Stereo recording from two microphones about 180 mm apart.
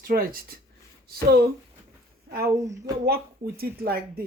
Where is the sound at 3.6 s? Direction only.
60° right (ahead or behind).